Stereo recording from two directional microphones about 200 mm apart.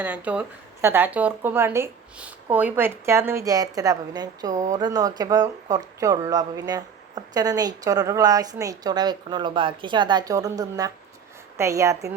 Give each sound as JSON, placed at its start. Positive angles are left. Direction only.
{"t": 0.0, "sound": "speech", "side_deg": -5}